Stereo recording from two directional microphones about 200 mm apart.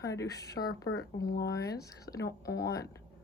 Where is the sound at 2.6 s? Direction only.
55° left (ahead or behind).